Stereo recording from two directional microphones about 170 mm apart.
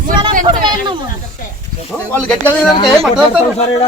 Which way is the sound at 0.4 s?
25° right (ahead or behind).